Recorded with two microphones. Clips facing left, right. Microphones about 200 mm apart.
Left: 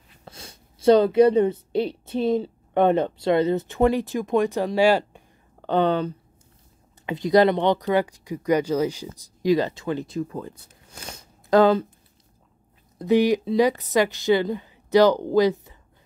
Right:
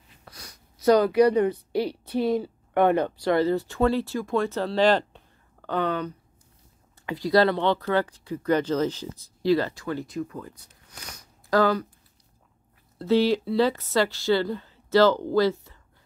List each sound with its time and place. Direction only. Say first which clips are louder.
0.2 s speech: left 5 dB; 25° left (ahead or behind); by 5.2 s 10° left (ahead or behind)
5.6 s speech: left 6 dB; 25° left (ahead or behind)
13.0 s speech: left 2 dB; 15° left (ahead or behind)